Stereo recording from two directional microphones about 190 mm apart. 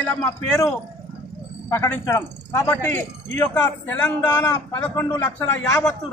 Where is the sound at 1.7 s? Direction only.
10° left (ahead or behind).